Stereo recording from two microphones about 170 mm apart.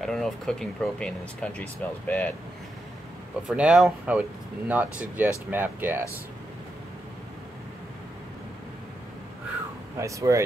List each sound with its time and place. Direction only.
0.0 s speech: centre (ahead or behind)
3.4 s speech: 5° right (ahead or behind)
9.9 s speech: 20° right (ahead or behind)